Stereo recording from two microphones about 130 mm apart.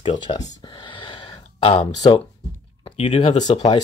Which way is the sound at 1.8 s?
30° left (ahead or behind).